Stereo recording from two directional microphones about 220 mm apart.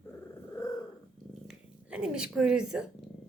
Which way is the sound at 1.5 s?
5° right (ahead or behind).